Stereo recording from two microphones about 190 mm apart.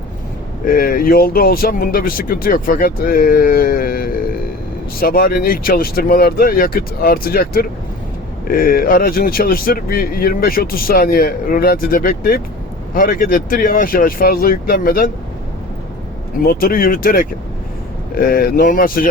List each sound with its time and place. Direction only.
0.6 s speech: 50° left (ahead or behind)
16.4 s speech: 50° left (ahead or behind)